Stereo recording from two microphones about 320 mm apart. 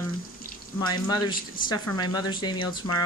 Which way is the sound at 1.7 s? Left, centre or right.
Centre.